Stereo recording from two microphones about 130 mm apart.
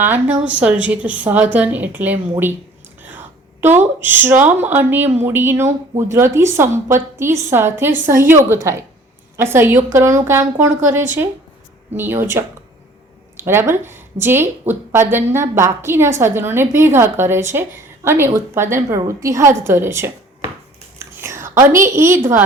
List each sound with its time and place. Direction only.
0.0 s a woman's voice: 15° right (ahead or behind)
3.0 s whispering: 15° right (ahead or behind)
4.0 s a woman's voice: 15° right (ahead or behind)
11.9 s a woman's voice: 15° right (ahead or behind)